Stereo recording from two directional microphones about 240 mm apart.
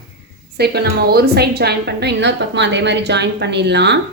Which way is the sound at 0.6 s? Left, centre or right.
Right.